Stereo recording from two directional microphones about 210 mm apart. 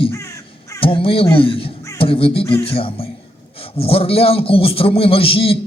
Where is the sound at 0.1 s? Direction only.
15° left (ahead or behind).